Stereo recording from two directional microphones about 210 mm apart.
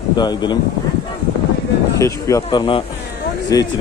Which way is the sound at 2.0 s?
15° left (ahead or behind).